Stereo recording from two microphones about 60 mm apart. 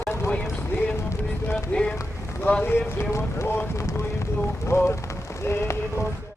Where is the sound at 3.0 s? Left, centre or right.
Left.